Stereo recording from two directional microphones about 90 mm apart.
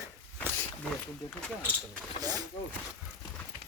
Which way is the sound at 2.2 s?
45° right (ahead or behind).